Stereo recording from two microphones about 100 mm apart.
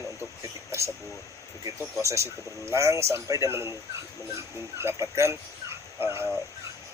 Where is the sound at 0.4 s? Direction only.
30° right (ahead or behind).